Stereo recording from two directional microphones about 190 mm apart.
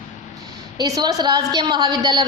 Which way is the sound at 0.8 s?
20° right (ahead or behind).